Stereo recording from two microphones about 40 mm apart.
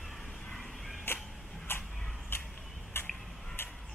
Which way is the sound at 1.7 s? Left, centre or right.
Left.